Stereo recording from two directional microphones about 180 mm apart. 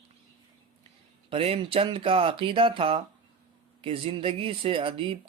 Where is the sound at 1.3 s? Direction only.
30° right (ahead or behind).